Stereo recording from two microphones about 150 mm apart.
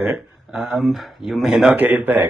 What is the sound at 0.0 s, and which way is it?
Speech, 5° right (ahead or behind).